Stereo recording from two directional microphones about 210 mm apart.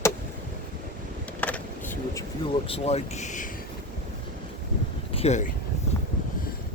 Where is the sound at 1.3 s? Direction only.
5° left (ahead or behind).